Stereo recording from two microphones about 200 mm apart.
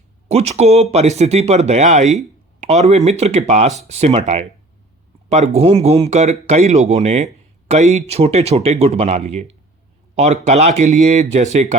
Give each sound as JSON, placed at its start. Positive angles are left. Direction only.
{"t": 0.3, "sound": "speech", "side_deg": -30}
{"t": 5.5, "sound": "speech", "side_deg": -30}